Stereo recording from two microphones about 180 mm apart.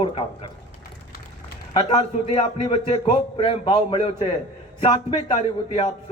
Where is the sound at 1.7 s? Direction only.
25° left (ahead or behind).